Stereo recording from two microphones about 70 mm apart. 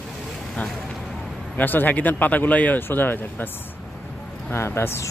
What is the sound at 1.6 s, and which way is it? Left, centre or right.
Speech, left.